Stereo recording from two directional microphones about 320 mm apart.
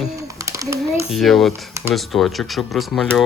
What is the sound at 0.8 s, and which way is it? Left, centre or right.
Speech, centre.